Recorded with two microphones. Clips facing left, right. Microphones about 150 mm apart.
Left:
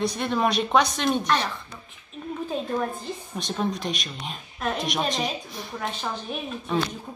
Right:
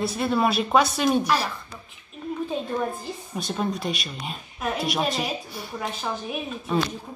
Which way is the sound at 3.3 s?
5° right (ahead or behind).